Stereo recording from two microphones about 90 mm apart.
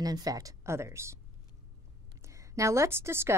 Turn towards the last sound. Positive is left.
turn(degrees=-30)  # may be behind; listen again after turning